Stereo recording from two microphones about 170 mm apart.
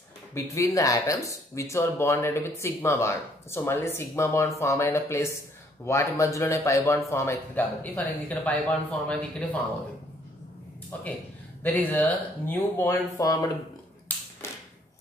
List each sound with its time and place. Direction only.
0.3 s speech: 20° left (ahead or behind)
11.6 s speech: 10° left (ahead or behind)
14.1 s a sound: 10° left (ahead or behind)